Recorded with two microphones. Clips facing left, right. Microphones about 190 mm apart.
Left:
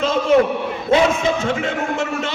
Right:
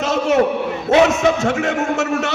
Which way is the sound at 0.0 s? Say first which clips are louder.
Left 1 dB; 75° right (ahead or behind).